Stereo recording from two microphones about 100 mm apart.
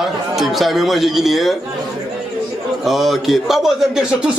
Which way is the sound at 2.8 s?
Centre (ahead or behind).